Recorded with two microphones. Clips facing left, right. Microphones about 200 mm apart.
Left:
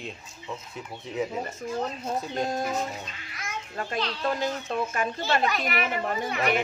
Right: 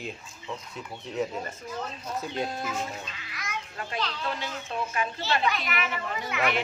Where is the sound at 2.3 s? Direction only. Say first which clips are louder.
Left 3 dB; 45° left (ahead or behind).